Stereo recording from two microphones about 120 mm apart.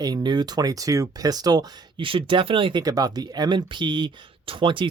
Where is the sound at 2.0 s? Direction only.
50° right (ahead or behind).